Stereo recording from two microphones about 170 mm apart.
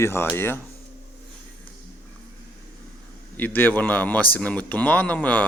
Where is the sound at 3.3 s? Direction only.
10° left (ahead or behind).